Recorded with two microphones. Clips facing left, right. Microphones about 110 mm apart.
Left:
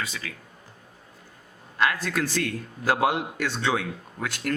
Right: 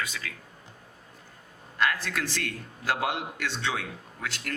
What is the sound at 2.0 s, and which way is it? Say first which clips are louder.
A man's voice: left 6 dB; 45° left (ahead or behind).